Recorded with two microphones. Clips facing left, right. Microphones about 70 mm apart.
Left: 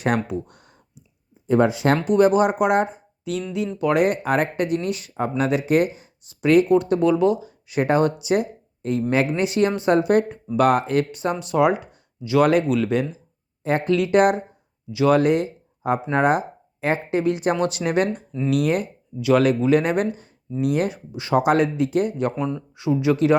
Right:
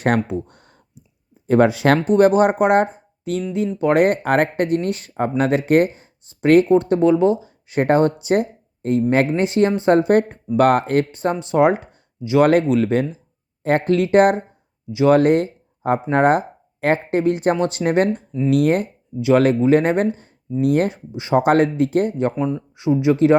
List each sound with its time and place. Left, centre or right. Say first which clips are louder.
0.3 s a sound: right 3 dB; right
1.5 s speech: right 3 dB; right
2.0 s speech: right 2 dB; right
12.2 s speech: right 3 dB; right
13.6 s speech: right 3 dB; right
21.2 s speech: right 2 dB; right
21.4 s speech: right 5 dB; right
22.7 s speech: right 3 dB; right